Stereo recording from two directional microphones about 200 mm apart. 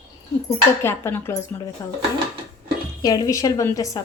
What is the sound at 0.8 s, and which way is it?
A woman's voice, 10° left (ahead or behind).